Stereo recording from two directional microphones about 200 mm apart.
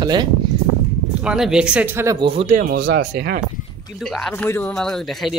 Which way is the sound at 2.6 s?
45° right (ahead or behind).